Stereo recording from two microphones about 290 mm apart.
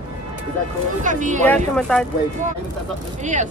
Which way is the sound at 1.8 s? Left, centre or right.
Centre.